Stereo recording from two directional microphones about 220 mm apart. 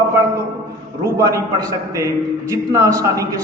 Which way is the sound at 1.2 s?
15° right (ahead or behind).